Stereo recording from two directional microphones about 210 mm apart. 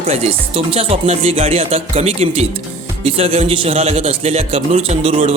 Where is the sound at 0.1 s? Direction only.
30° right (ahead or behind).